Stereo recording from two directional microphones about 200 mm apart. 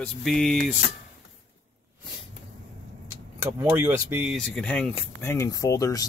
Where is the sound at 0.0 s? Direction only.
5° left (ahead or behind).